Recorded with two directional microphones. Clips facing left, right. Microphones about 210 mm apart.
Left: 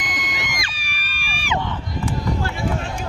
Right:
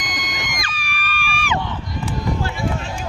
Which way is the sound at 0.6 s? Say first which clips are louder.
Right 5 dB; 35° left (ahead or behind).